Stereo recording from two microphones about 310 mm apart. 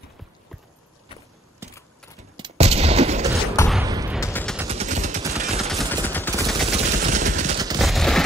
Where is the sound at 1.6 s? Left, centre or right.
Centre.